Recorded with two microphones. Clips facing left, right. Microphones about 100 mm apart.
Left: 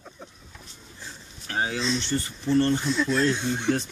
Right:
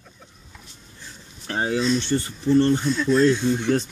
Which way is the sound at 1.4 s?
35° right (ahead or behind).